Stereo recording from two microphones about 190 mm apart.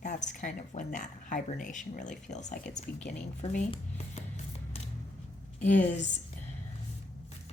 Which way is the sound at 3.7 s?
35° left (ahead or behind).